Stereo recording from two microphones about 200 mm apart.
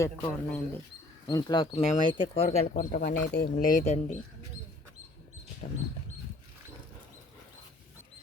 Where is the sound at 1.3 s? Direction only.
20° left (ahead or behind).